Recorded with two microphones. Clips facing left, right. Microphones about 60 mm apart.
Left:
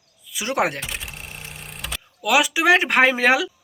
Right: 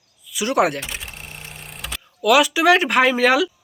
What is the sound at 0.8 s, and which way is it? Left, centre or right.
Cash register, centre.